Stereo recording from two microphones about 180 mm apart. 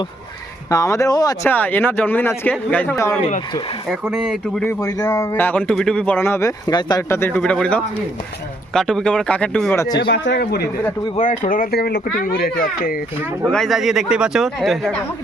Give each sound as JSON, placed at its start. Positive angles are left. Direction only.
{"t": 0.7, "sound": "speech", "side_deg": 20}
{"t": 1.5, "sound": "a man's voice", "side_deg": 10}
{"t": 3.8, "sound": "a man's voice", "side_deg": 0}
{"t": 4.6, "sound": "a man's voice", "side_deg": 20}
{"t": 9.8, "sound": "speech", "side_deg": 20}
{"t": 10.1, "sound": "a man's voice", "side_deg": 75}
{"t": 11.2, "sound": "speech", "side_deg": 50}
{"t": 13.5, "sound": "a man's voice", "side_deg": 0}